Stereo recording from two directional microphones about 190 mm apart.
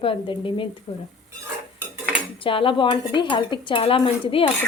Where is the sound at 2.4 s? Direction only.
25° left (ahead or behind).